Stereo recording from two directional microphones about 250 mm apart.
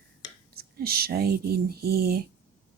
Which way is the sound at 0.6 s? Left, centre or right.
Right.